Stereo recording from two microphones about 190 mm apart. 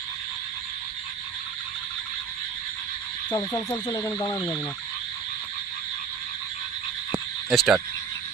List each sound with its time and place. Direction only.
3.2 s speech: 15° left (ahead or behind)
4.4 s speech: 5° left (ahead or behind)
7.5 s speech: centre (ahead or behind)